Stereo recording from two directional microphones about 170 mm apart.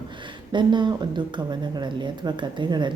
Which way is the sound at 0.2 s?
30° right (ahead or behind).